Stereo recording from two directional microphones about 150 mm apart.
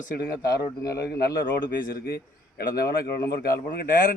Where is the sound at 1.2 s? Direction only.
85° left.